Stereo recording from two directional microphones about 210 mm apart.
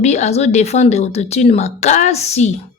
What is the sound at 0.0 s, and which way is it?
Speech, 30° left (ahead or behind).